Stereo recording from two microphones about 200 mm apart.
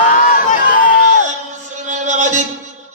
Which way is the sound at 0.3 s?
45° left (ahead or behind).